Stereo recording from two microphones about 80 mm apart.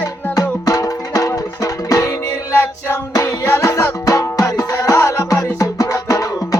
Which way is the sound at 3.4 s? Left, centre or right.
Left.